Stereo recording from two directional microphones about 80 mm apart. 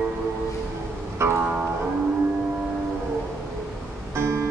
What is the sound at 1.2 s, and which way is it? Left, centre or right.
Music, right.